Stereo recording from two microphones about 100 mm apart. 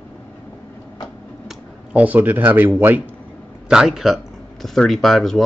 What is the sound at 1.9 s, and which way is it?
Speech, 15° right (ahead or behind).